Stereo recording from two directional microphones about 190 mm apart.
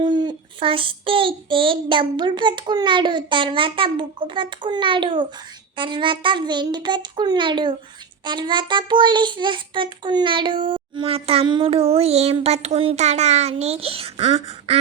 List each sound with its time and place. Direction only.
0.0 s child singing: 25° right (ahead or behind)